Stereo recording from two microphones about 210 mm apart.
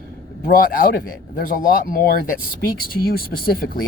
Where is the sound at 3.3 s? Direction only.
45° left (ahead or behind).